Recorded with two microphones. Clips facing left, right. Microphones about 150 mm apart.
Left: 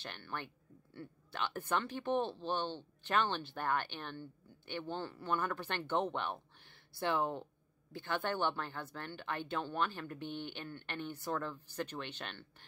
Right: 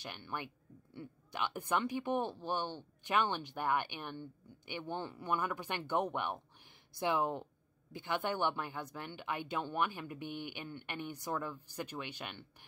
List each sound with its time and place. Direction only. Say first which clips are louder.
0.0 s speech: right 1 dB; 15° right (ahead or behind)